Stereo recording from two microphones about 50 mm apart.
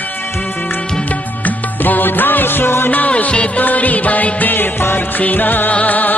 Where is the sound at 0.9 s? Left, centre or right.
Left.